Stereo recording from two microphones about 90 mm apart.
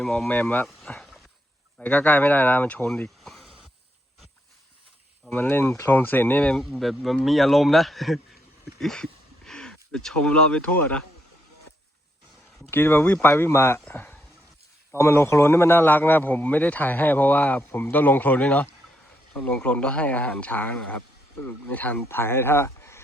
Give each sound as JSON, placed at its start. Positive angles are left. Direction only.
{"t": 0.0, "sound": "speech", "side_deg": 5}
{"t": 0.3, "sound": "speech", "side_deg": 15}
{"t": 0.9, "sound": "a sound", "side_deg": 5}
{"t": 1.8, "sound": "a man's voice", "side_deg": 15}
{"t": 5.3, "sound": "a man's voice", "side_deg": 25}
{"t": 6.6, "sound": "speech", "side_deg": 0}
{"t": 12.7, "sound": "a man's voice", "side_deg": 25}
{"t": 14.9, "sound": "a man's voice", "side_deg": 30}